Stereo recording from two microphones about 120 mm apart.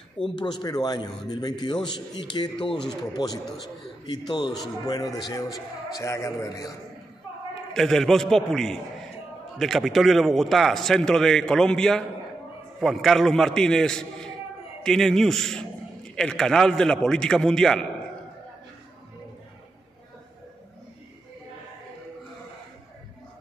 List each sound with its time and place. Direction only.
0.4 s a man's voice: 35° left (ahead or behind)
7.7 s a man's voice: 5° left (ahead or behind)